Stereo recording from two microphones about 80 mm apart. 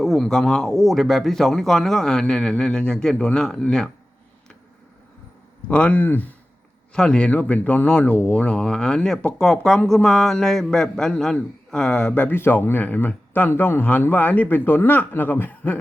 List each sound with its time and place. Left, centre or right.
0.0 s speech: centre
5.6 s speech: centre
6.9 s speech: centre
12.3 s speech: left